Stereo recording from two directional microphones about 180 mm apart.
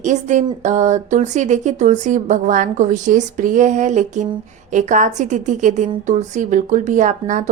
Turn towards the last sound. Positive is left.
turn(degrees=-45)  # may be behind; listen again after turning